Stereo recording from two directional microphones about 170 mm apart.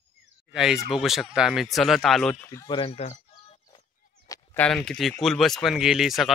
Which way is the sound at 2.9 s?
35° left (ahead or behind).